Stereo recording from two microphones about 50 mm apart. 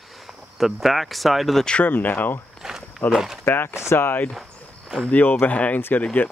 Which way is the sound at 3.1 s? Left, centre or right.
Centre.